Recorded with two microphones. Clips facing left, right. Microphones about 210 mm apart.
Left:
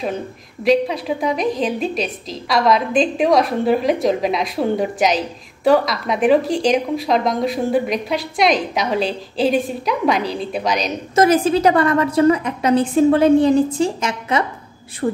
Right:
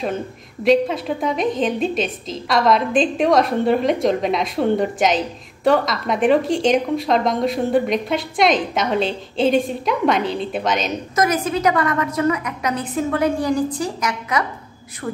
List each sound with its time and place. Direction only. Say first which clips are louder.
0.7 s a woman's voice: even; centre (ahead or behind)
11.1 s a woman's voice: left 6 dB; 30° left (ahead or behind)